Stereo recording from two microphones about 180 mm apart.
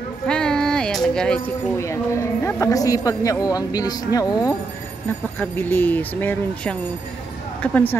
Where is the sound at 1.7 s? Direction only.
15° left (ahead or behind).